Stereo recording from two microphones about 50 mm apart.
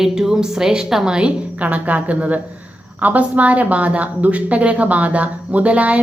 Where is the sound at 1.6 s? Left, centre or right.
Right.